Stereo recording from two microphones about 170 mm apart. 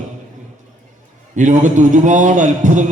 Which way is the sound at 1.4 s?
45° right (ahead or behind).